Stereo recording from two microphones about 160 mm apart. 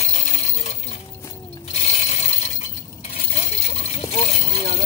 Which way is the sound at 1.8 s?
45° left (ahead or behind).